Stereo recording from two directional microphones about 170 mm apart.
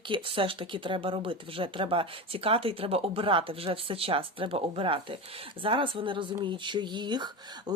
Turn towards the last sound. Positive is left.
turn(degrees=-25)  # may be behind; listen again after turning